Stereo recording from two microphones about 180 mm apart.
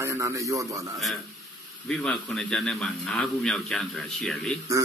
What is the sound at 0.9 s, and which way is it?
A man's voice, centre (ahead or behind).